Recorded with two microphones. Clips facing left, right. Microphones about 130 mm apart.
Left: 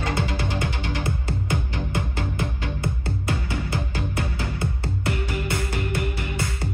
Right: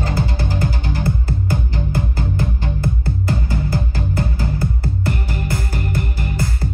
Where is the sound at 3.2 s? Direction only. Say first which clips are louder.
Right 5 dB; 35° right (ahead or behind).